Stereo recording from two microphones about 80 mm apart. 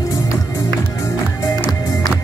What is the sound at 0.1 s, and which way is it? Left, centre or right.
Music, left.